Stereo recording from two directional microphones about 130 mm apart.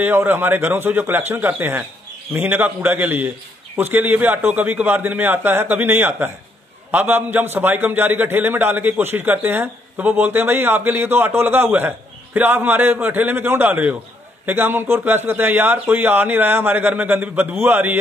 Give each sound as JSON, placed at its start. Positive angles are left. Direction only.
{"t": 0.0, "sound": "a man's voice", "side_deg": -15}